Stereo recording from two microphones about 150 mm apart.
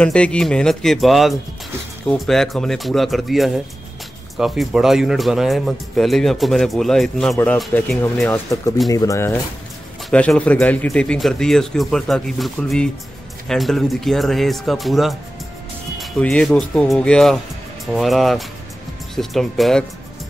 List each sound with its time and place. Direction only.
0.0 s speech: 10° left (ahead or behind)
8.3 s speech: 20° left (ahead or behind)
10.0 s speech: 5° left (ahead or behind)